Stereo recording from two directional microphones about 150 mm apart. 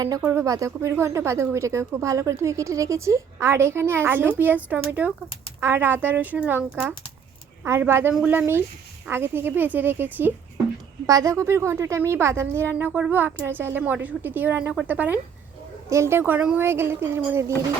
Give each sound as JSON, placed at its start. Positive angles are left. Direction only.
{"t": 0.2, "sound": "speech", "side_deg": -15}
{"t": 7.6, "sound": "speech", "side_deg": -15}